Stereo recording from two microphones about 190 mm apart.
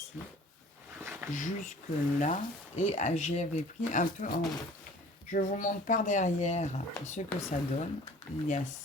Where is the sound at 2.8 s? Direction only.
40° left (ahead or behind).